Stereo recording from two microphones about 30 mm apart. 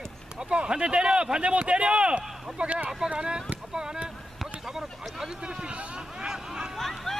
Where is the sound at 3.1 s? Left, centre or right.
Right.